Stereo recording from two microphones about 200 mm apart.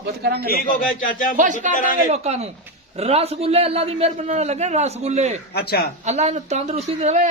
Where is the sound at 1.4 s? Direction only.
40° right (ahead or behind).